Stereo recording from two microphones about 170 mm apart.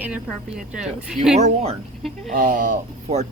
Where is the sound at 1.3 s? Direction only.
40° right (ahead or behind).